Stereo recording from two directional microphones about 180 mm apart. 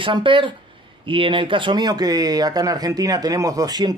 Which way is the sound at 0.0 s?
25° right (ahead or behind).